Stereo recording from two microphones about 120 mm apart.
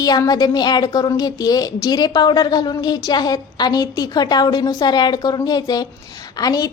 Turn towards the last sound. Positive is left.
turn(degrees=30)  # may be behind; listen again after turning